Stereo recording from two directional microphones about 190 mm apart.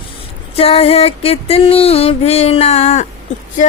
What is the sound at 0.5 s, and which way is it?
Music, 30° left (ahead or behind).